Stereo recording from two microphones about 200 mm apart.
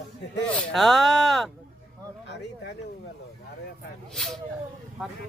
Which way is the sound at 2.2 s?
60° left (ahead or behind).